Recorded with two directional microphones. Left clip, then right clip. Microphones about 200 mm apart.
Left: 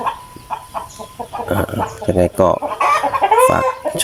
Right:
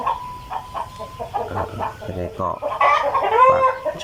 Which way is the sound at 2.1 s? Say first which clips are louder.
Left 13 dB; 45° left (ahead or behind).